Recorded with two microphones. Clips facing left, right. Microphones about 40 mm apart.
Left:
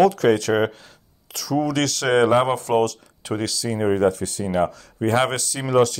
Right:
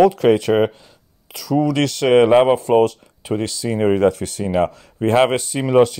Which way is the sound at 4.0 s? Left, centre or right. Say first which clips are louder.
Right 3 dB; right.